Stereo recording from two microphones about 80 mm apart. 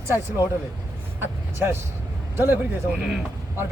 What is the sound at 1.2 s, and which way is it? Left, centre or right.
A man's voice, right.